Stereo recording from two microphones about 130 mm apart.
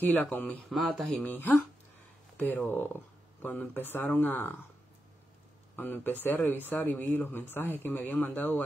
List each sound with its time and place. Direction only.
0.0 s speech: 15° left (ahead or behind)
0.7 s speech: centre (ahead or behind)
5.8 s speech: 15° left (ahead or behind)